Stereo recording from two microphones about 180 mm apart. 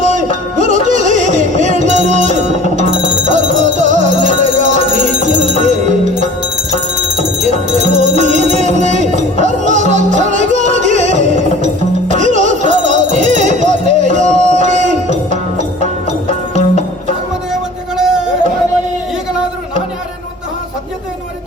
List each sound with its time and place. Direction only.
0.0 s music: 45° right (ahead or behind)
7.8 s music: 40° right (ahead or behind)
16.6 s music: 35° left (ahead or behind)
17.9 s a sound: 5° right (ahead or behind)